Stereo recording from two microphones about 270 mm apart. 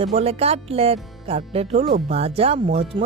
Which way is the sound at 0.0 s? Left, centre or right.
Right.